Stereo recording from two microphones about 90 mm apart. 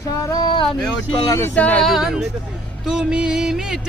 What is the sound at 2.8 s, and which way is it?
Music, 5° right (ahead or behind).